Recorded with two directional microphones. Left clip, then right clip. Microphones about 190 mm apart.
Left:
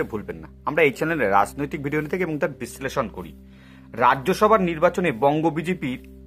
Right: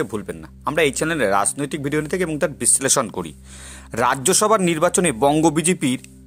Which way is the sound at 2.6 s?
40° right (ahead or behind).